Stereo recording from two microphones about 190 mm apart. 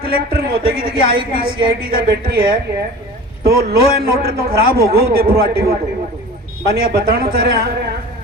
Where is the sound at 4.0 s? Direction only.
50° right (ahead or behind).